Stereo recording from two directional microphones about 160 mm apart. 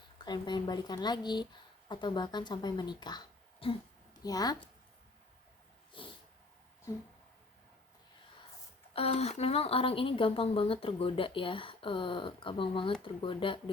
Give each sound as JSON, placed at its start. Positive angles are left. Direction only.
{"t": 0.3, "sound": "speech", "side_deg": 30}
{"t": 5.9, "sound": "a sound", "side_deg": 30}
{"t": 8.9, "sound": "a woman's voice", "side_deg": 40}